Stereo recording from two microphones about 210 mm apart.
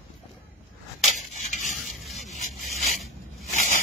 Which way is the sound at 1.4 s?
35° left (ahead or behind).